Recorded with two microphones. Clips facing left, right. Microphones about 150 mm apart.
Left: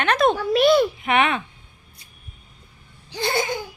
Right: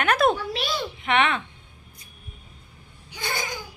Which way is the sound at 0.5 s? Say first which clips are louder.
Left 13 dB; 55° left (ahead or behind).